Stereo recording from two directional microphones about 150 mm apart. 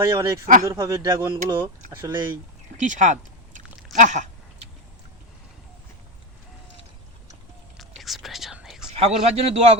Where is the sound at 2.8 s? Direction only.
55° right (ahead or behind).